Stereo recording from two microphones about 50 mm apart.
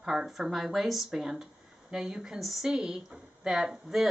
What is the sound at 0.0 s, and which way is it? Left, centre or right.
Speech, centre.